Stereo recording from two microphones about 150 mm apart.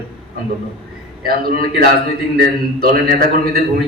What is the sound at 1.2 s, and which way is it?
A man's voice, 75° right (ahead or behind).